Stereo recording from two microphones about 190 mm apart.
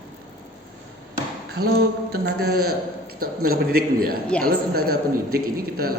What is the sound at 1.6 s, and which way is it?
A man's voice, 55° right (ahead or behind).